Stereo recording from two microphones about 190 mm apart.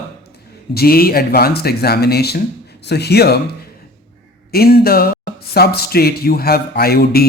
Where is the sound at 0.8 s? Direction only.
55° left (ahead or behind).